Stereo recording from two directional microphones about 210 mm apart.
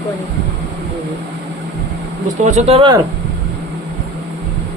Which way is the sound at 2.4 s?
35° right (ahead or behind).